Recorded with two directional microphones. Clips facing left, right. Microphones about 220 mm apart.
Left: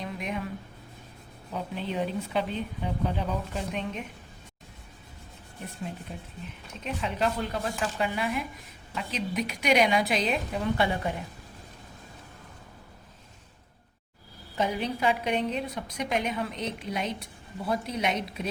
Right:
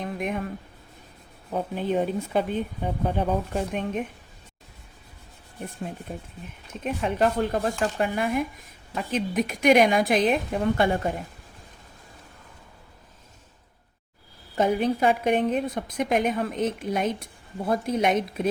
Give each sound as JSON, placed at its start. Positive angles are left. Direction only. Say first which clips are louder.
{"t": 0.0, "sound": "a sound", "louder": "right 5 dB", "side_deg": -50}
{"t": 1.5, "sound": "a woman's voice", "louder": "right 6 dB", "side_deg": -50}
{"t": 6.1, "sound": "a woman's voice", "louder": "right 3 dB", "side_deg": -45}
{"t": 14.5, "sound": "a woman's voice", "louder": "right 6 dB", "side_deg": -50}